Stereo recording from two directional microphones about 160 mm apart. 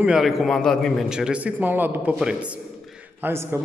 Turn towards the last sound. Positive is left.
turn(degrees=-15)  # may be behind; listen again after turning